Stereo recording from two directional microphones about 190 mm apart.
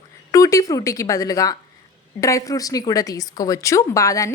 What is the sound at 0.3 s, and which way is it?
Speech, 15° left (ahead or behind).